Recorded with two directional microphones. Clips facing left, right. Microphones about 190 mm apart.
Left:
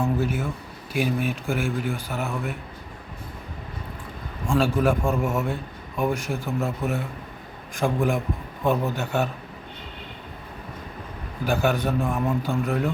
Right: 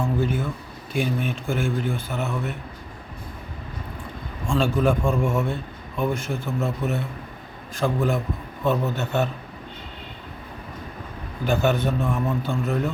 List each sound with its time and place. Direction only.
0.0 s a man's voice: 5° left (ahead or behind)
4.4 s a man's voice: 10° left (ahead or behind)
11.4 s a man's voice: 10° left (ahead or behind)